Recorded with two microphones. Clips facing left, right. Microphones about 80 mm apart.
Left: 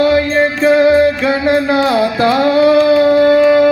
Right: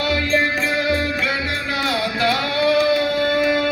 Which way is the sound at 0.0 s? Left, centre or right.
Left.